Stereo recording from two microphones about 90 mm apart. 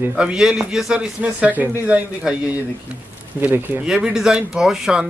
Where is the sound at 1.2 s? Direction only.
15° right (ahead or behind).